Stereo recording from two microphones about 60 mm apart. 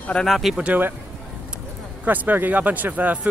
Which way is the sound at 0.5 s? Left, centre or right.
Right.